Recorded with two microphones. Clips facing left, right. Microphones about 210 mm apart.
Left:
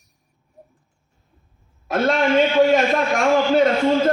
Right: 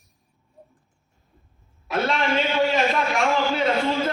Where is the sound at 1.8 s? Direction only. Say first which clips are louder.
Left 5 dB; 45° left (ahead or behind).